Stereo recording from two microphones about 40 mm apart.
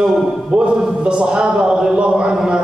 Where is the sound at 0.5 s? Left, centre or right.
Right.